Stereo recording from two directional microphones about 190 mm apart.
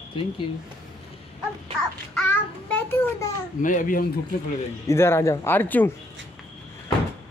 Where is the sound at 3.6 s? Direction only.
45° left (ahead or behind).